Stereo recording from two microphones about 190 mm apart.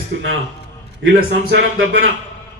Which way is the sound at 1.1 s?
75° right (ahead or behind).